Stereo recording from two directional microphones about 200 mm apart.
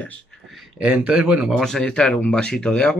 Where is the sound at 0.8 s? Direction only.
5° right (ahead or behind).